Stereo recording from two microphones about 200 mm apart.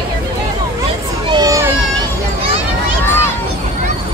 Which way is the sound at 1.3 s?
20° right (ahead or behind).